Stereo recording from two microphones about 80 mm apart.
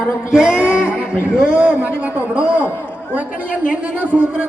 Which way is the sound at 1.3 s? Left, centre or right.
Centre.